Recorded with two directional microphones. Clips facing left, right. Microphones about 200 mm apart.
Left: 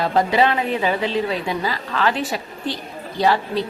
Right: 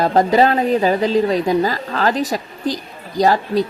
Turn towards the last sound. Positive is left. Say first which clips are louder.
# right 4 dB
turn(degrees=-40)  # may be behind; listen again after turning